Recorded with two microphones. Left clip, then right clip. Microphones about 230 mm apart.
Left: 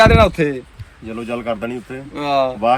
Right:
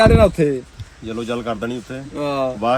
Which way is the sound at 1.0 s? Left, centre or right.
Centre.